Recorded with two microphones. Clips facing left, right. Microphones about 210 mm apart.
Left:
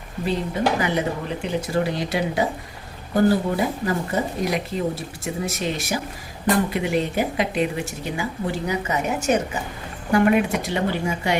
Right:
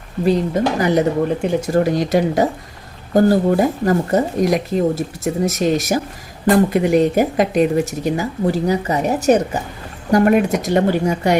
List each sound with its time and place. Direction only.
0.3 s a woman's voice: 40° right (ahead or behind)